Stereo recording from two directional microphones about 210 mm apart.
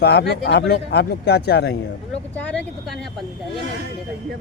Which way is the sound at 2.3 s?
5° left (ahead or behind).